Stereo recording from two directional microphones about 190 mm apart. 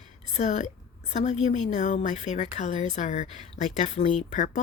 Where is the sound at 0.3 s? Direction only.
40° left (ahead or behind).